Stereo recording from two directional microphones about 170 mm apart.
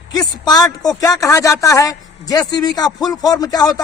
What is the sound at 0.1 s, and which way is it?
A man's voice, 25° left (ahead or behind).